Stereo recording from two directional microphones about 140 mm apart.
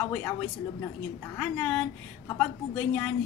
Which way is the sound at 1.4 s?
10° left (ahead or behind).